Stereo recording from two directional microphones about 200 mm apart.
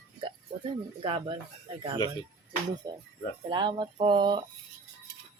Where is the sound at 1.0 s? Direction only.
25° right (ahead or behind).